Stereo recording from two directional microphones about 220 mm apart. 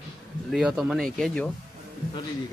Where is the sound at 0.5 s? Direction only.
Centre (ahead or behind).